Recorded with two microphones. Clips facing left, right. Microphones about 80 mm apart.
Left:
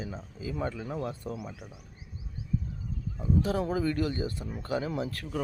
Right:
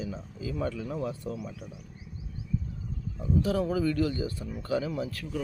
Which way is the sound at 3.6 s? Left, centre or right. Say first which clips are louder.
Right 2 dB; left.